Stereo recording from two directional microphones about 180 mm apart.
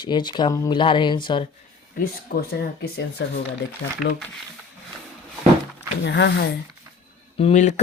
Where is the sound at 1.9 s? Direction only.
55° left (ahead or behind).